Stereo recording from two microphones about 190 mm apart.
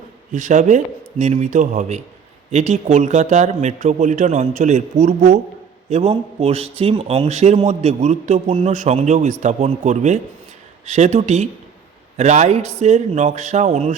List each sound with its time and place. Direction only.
0.3 s a man's voice: 40° right (ahead or behind)